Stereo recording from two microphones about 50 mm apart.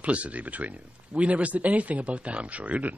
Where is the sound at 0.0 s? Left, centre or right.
Right.